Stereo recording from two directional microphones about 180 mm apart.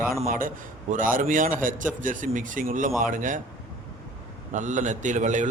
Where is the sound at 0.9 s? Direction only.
50° right (ahead or behind).